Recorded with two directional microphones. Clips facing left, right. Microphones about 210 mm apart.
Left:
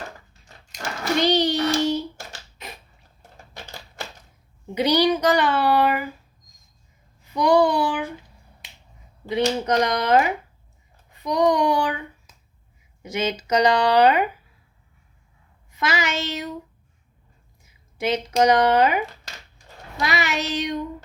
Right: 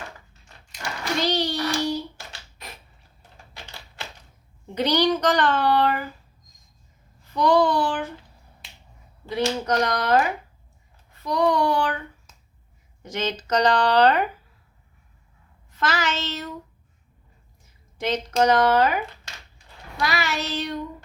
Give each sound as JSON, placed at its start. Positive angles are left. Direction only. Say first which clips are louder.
{"t": 1.2, "sound": "child singing", "louder": "left 5 dB", "side_deg": 20}
{"t": 3.5, "sound": "typewriter", "louder": "left 4 dB", "side_deg": 45}
{"t": 4.7, "sound": "speech", "louder": "left 2 dB", "side_deg": 10}
{"t": 7.3, "sound": "child singing", "louder": "left 1 dB", "side_deg": 10}
{"t": 9.3, "sound": "speech", "louder": "left 2 dB", "side_deg": 20}
{"t": 11.1, "sound": "child singing", "louder": "left 2 dB", "side_deg": 15}
{"t": 13.0, "sound": "speech", "louder": "left 3 dB", "side_deg": 10}
{"t": 15.7, "sound": "speech", "louder": "left 1 dB", "side_deg": 10}
{"t": 17.9, "sound": "speech", "louder": "left 2 dB", "side_deg": 10}
{"t": 20.0, "sound": "child singing", "louder": "left 1 dB", "side_deg": 20}